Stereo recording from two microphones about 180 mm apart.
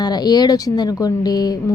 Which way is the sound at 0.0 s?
20° left (ahead or behind).